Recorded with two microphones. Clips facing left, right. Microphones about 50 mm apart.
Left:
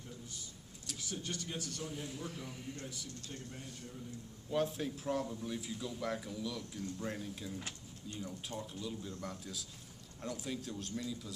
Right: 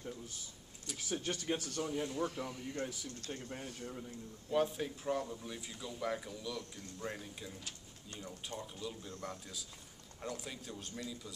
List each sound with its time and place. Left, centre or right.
1.1 s speech: right
1.9 s speech: centre
2.7 s speech: right
4.5 s speech: centre